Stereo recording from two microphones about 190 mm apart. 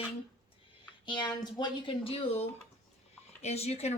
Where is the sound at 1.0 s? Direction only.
25° left (ahead or behind).